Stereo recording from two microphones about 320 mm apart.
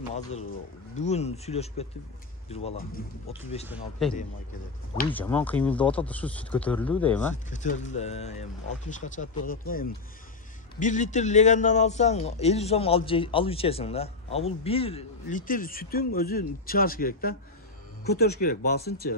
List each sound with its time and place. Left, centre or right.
0.1 s a man's voice: left
3.6 s speech: centre
7.4 s a man's voice: left